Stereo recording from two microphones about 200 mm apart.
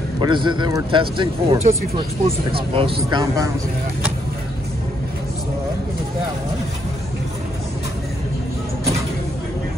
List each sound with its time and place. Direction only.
0.2 s speech: 25° right (ahead or behind)